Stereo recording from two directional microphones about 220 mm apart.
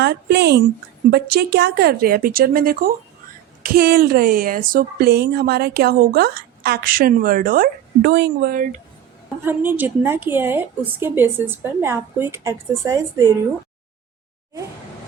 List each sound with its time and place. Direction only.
0.0 s speech: 50° right (ahead or behind)
9.4 s a woman's voice: 10° right (ahead or behind)